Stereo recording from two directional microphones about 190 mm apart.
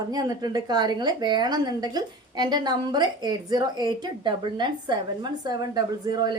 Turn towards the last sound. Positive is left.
turn(degrees=-20)  # may be behind; listen again after turning